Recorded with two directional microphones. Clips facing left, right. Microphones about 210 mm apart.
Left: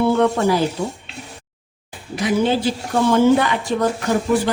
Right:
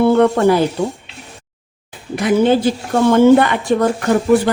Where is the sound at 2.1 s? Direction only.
55° right (ahead or behind).